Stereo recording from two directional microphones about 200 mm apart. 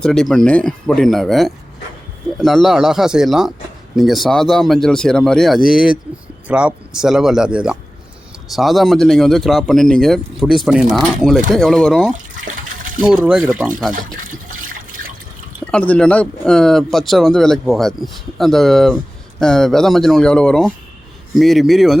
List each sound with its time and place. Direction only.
0.0 s speech: 5° left (ahead or behind)
12.1 s water: 40° right (ahead or behind)
13.0 s speech: 5° right (ahead or behind)
15.6 s speech: 5° left (ahead or behind)